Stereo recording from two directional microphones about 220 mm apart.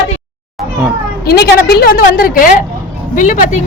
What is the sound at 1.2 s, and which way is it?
A woman's voice, 45° left (ahead or behind).